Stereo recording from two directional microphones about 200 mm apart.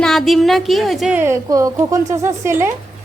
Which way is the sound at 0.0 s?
Centre (ahead or behind).